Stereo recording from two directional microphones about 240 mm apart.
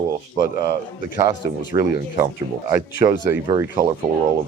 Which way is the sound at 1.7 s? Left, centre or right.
Right.